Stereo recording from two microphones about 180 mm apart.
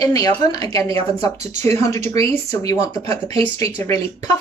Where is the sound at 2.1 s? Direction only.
20° left (ahead or behind).